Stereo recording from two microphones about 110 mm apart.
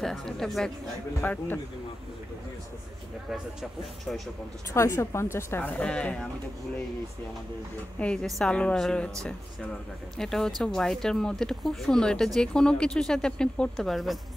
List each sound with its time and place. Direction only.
0.0 s speech: centre (ahead or behind)
1.2 s speech: 15° left (ahead or behind)
4.7 s a woman's voice: 25° left (ahead or behind); by 6.2 s 10° left (ahead or behind)
8.0 s speech: 10° left (ahead or behind)
10.1 s speech: 5° left (ahead or behind)